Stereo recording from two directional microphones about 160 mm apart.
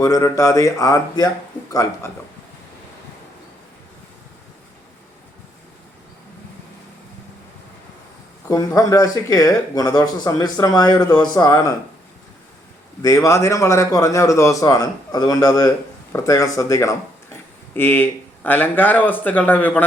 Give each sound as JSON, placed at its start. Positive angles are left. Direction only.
{"t": 0.0, "sound": "speech", "side_deg": 20}
{"t": 8.4, "sound": "speech", "side_deg": 20}
{"t": 13.0, "sound": "speech", "side_deg": 20}